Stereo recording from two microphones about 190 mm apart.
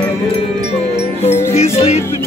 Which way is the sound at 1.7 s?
35° left (ahead or behind).